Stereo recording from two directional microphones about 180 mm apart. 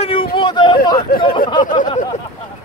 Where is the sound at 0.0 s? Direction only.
30° left (ahead or behind).